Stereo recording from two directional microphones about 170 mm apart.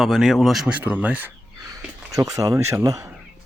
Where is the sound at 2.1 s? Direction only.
20° right (ahead or behind).